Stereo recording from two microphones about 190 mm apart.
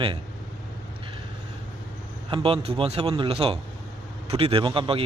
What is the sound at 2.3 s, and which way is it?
Speech, 30° right (ahead or behind).